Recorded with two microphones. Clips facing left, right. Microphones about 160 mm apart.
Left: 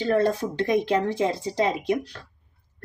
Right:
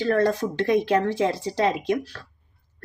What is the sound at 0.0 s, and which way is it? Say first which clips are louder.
Speech: right 1 dB; 10° left (ahead or behind).